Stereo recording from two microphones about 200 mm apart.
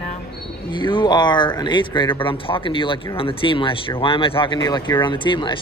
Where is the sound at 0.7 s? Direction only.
25° left (ahead or behind).